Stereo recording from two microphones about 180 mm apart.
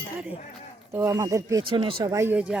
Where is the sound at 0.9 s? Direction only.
15° right (ahead or behind).